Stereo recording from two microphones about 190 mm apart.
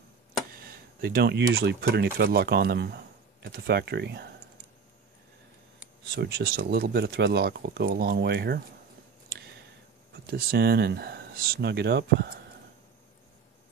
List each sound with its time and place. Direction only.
0.6 s speech: 50° right (ahead or behind)
6.1 s speech: 60° right (ahead or behind)
10.3 s speech: 55° right (ahead or behind)